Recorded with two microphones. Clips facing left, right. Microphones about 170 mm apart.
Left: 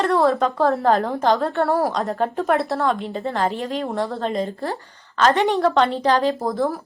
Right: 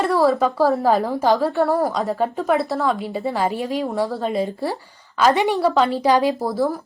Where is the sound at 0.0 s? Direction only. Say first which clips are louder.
Right 1 dB; 5° right (ahead or behind).